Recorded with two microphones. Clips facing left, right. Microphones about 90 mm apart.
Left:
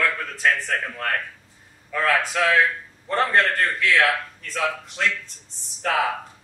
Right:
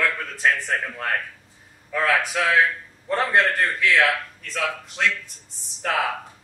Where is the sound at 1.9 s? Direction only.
5° right (ahead or behind).